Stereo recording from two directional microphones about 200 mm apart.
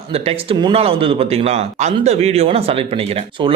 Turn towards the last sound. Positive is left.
turn(degrees=-25)  # may be behind; listen again after turning